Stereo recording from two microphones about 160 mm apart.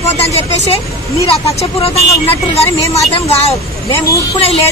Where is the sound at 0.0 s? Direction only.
40° left (ahead or behind).